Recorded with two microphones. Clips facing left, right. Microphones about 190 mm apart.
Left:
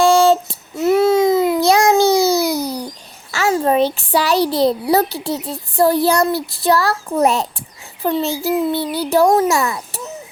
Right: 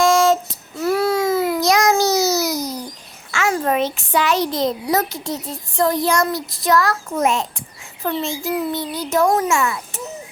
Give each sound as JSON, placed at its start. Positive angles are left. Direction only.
{"t": 0.0, "sound": "child singing", "side_deg": 30}
{"t": 0.8, "sound": "baby cry", "side_deg": 20}
{"t": 1.6, "sound": "a sound", "side_deg": 30}
{"t": 3.5, "sound": "a child's voice", "side_deg": 30}
{"t": 8.4, "sound": "a child's voice", "side_deg": 35}